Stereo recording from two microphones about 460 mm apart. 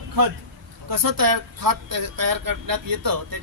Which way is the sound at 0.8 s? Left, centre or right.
Right.